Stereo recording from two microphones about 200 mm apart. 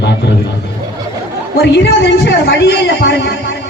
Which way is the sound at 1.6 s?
60° left (ahead or behind).